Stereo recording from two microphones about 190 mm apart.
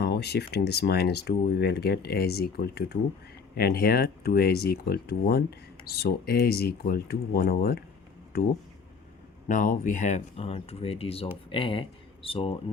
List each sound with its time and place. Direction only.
0.0 s speech: 60° left (ahead or behind)
9.5 s speech: 45° left (ahead or behind); by 12.5 s 30° left (ahead or behind)